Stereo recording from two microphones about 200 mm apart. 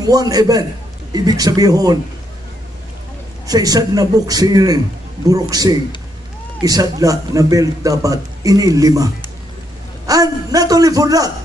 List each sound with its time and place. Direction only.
0.0 s a man's voice: 20° right (ahead or behind)
3.4 s a man's voice: 20° right (ahead or behind)